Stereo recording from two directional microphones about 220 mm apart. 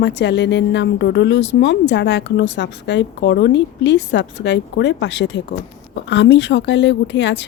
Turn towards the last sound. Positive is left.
turn(degrees=55)  # may be behind; listen again after turning